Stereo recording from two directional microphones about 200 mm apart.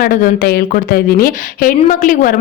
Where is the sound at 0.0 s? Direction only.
45° left (ahead or behind).